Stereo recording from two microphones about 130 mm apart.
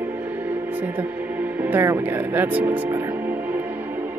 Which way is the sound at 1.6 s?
15° right (ahead or behind).